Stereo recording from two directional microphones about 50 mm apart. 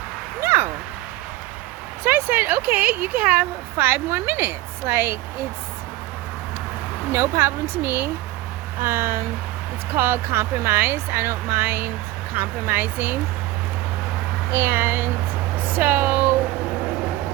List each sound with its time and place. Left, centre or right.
0.4 s a sound: right
2.0 s a sound: right
2.6 s a woman's voice: right
7.1 s speech: right
7.9 s speech: right
8.8 s speech: right
12.3 s a woman's voice: right
14.5 s speech: right
15.5 s speech: right